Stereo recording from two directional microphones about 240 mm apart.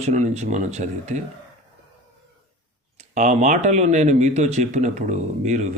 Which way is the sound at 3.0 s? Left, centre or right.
Right.